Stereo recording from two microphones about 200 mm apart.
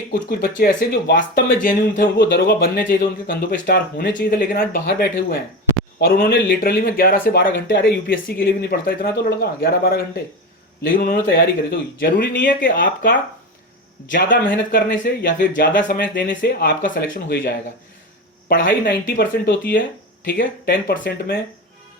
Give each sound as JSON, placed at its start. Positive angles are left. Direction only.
{"t": 0.1, "sound": "speech", "side_deg": 50}
{"t": 4.3, "sound": "a man's voice", "side_deg": 45}
{"t": 14.5, "sound": "speech", "side_deg": 60}
{"t": 15.0, "sound": "speech", "side_deg": 45}